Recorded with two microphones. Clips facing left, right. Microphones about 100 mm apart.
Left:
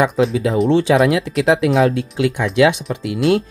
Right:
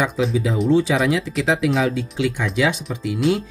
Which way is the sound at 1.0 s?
60° left (ahead or behind).